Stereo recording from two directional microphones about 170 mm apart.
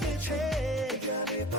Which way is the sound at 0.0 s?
Centre (ahead or behind).